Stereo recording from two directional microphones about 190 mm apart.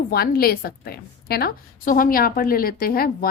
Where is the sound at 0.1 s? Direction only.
55° left (ahead or behind).